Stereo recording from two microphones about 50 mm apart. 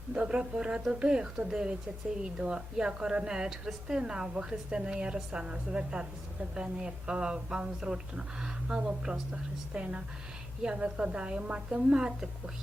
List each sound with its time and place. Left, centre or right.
0.1 s a woman's voice: right